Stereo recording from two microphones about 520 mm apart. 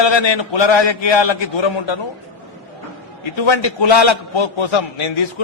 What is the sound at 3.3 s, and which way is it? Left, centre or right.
A man's voice, left.